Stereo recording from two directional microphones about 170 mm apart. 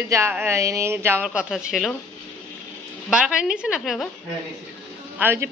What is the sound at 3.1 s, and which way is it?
A woman's voice, 5° right (ahead or behind).